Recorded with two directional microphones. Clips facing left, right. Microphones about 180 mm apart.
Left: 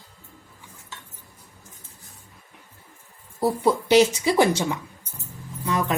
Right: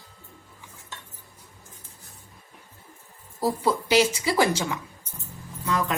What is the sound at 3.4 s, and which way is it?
Speech, 20° left (ahead or behind).